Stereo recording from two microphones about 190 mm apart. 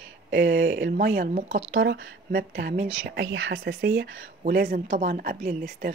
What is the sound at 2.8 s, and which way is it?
Speech, 70° right (ahead or behind).